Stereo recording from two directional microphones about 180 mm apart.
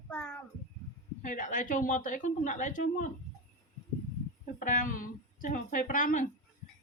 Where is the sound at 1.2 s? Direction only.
45° left (ahead or behind).